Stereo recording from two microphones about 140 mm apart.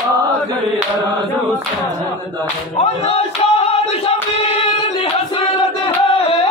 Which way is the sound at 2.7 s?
45° left (ahead or behind).